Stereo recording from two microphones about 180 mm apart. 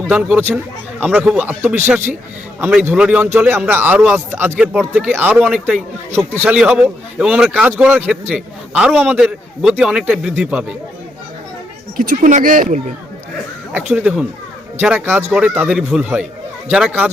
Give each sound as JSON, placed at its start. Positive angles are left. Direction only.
{"t": 0.0, "sound": "a man's voice", "side_deg": -5}
{"t": 11.9, "sound": "speech", "side_deg": -50}
{"t": 13.7, "sound": "a man's voice", "side_deg": -10}